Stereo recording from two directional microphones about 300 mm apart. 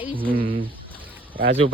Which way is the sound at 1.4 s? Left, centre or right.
Right.